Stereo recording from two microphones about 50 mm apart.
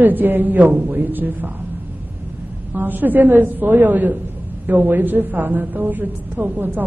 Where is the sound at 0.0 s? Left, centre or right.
Right.